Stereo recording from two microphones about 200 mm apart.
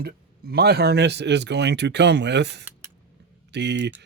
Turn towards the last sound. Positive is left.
turn(degrees=-60)  # may be behind; listen again after turning